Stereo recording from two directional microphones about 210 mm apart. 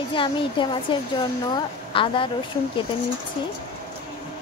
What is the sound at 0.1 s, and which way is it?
Speech, 25° left (ahead or behind).